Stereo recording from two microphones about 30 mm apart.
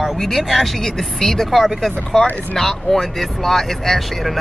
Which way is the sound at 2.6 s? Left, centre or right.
Centre.